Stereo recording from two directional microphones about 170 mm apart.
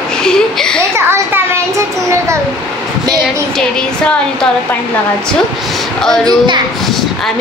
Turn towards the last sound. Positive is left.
turn(degrees=-25)  # may be behind; listen again after turning